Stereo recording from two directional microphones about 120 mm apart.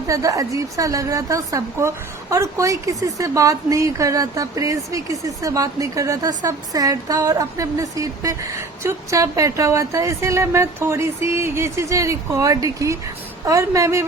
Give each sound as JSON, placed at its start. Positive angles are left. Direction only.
{"t": 0.1, "sound": "a woman's voice", "side_deg": -30}